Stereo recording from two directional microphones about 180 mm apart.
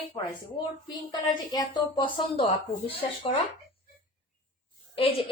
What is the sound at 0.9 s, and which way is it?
A woman's voice, 25° left (ahead or behind).